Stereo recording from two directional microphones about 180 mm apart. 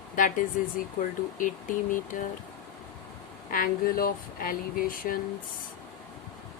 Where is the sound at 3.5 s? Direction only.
50° left (ahead or behind).